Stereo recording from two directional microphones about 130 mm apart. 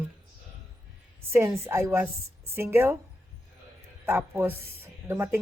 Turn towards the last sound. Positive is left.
turn(degrees=-15)  # may be behind; listen again after turning